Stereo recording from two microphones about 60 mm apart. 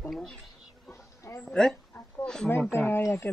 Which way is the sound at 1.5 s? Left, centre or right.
Centre.